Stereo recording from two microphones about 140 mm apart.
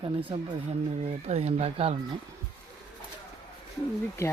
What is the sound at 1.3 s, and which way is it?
Speech, 50° right (ahead or behind).